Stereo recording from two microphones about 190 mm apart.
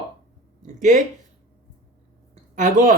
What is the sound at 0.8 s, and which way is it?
Speech, 40° right (ahead or behind).